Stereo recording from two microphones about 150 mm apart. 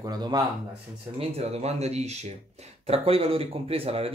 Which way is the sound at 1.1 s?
45° right (ahead or behind).